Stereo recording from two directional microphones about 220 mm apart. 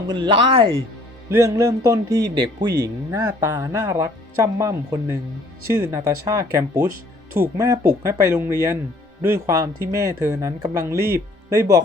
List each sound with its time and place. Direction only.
0.1 s speech: 20° right (ahead or behind)
1.3 s speech: 15° right (ahead or behind)